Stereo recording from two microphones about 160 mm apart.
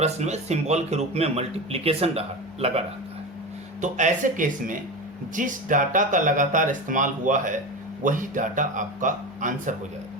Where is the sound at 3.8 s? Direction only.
50° right (ahead or behind).